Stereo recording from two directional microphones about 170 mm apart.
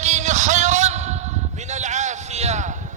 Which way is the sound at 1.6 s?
45° right (ahead or behind).